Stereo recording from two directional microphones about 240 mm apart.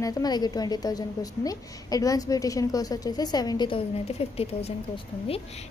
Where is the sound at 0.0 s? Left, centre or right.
Centre.